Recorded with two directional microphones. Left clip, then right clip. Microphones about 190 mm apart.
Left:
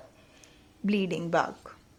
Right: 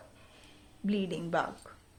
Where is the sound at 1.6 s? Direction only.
30° left (ahead or behind).